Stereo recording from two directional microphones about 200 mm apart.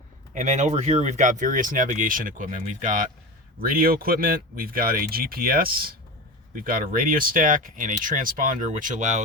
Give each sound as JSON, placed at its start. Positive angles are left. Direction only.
{"t": 0.3, "sound": "speech", "side_deg": -35}